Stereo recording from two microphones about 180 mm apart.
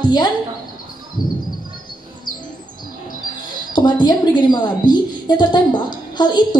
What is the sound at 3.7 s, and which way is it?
A woman's voice, 25° left (ahead or behind).